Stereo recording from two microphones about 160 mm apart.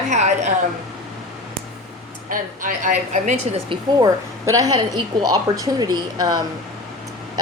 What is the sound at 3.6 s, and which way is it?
A woman's voice, 25° right (ahead or behind).